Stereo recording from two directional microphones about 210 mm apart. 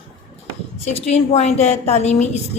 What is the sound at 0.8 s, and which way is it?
Speech, 30° left (ahead or behind).